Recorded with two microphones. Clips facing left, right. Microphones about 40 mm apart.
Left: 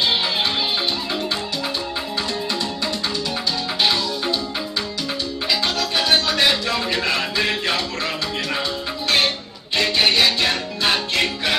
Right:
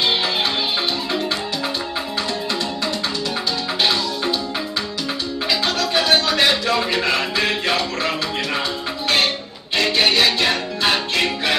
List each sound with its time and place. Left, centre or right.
0.1 s music: centre
3.8 s music: centre
5.5 s music: centre
9.8 s music: centre